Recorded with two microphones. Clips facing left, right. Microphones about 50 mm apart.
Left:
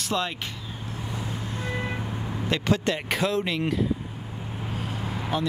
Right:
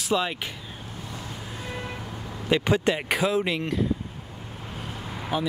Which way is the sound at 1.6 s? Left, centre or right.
Left.